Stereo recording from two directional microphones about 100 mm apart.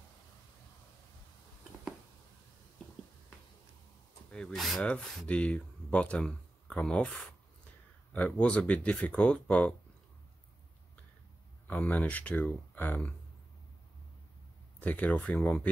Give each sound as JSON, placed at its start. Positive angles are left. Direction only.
{"t": 4.3, "sound": "speech", "side_deg": 5}
{"t": 5.2, "sound": "speech", "side_deg": 10}
{"t": 11.6, "sound": "speech", "side_deg": 15}
{"t": 14.8, "sound": "speech", "side_deg": 15}